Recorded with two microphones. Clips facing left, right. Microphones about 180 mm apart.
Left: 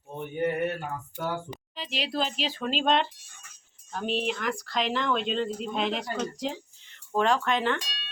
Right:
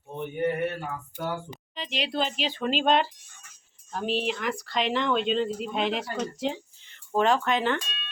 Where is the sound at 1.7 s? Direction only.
5° left (ahead or behind).